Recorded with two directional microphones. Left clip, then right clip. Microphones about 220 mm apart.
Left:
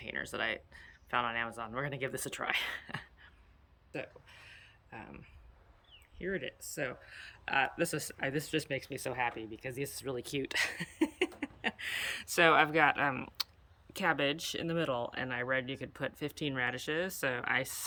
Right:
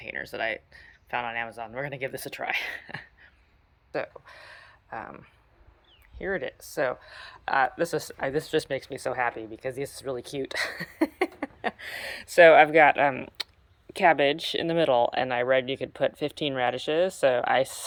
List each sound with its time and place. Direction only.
0.0 s speech: 10° left (ahead or behind)
3.9 s speech: centre (ahead or behind)
6.1 s speech: 40° right (ahead or behind)
6.6 s speech: centre (ahead or behind)